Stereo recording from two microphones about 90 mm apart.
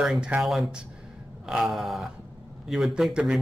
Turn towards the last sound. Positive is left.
turn(degrees=-5)  # may be behind; listen again after turning